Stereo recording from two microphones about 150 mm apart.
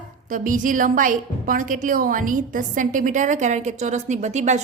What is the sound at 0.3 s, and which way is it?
A woman's voice, 65° right (ahead or behind).